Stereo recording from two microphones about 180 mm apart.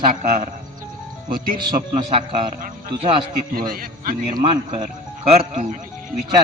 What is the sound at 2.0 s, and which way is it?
A man's voice, 30° right (ahead or behind).